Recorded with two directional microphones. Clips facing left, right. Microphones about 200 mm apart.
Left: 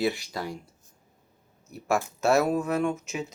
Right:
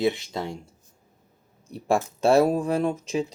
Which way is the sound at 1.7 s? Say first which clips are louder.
Right 3 dB; 30° right (ahead or behind).